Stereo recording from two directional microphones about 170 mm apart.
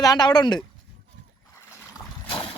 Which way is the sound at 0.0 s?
25° left (ahead or behind).